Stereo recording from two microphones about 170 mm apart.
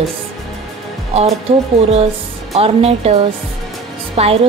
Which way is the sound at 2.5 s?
35° right (ahead or behind).